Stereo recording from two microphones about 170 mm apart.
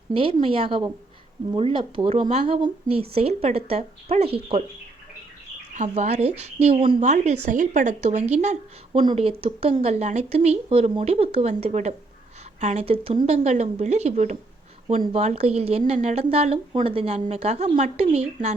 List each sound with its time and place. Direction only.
0.1 s a woman's voice: 30° right (ahead or behind)
5.7 s a woman's voice: 45° right (ahead or behind)
7.0 s speech: 45° right (ahead or behind)
8.9 s a woman's voice: 30° right (ahead or behind)